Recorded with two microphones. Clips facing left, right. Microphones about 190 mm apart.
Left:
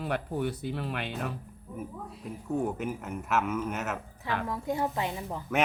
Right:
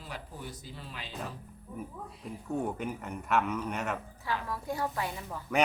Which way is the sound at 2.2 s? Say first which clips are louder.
Left 3 dB; centre (ahead or behind).